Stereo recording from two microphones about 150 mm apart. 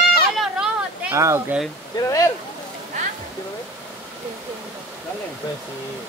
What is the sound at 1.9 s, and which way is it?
Speech, 20° left (ahead or behind).